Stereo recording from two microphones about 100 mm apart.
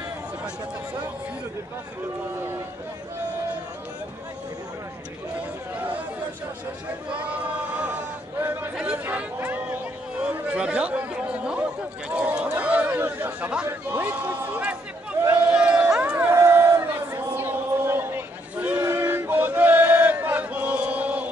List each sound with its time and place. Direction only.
7.1 s chant: 15° right (ahead or behind)
8.7 s chatter: 15° right (ahead or behind)
13.8 s a man's voice: 15° right (ahead or behind)
15.5 s crowd: 10° right (ahead or behind)